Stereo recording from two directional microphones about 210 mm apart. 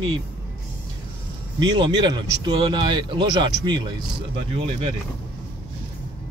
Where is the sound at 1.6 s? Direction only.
20° right (ahead or behind).